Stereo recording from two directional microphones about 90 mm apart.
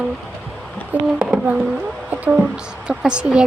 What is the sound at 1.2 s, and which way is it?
A woman's voice, 15° right (ahead or behind).